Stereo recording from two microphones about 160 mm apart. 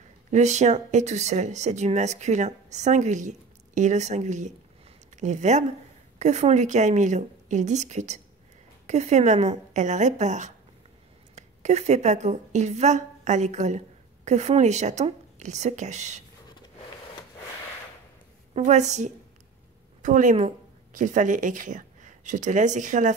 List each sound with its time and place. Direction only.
0.3 s a woman's voice: 45° right (ahead or behind)
18.5 s speech: 45° right (ahead or behind)